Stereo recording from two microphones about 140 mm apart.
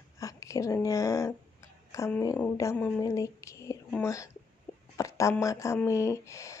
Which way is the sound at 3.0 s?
25° left (ahead or behind).